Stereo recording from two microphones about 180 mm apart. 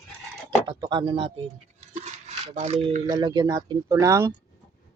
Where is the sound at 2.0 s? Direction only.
40° right (ahead or behind).